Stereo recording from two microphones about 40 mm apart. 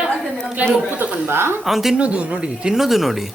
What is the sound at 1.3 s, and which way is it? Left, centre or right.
Speech, right.